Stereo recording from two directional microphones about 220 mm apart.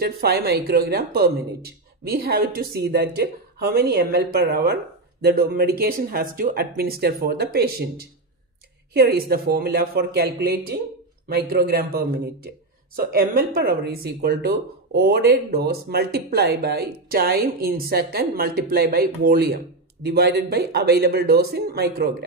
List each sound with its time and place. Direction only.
0.0 s speech: 45° right (ahead or behind)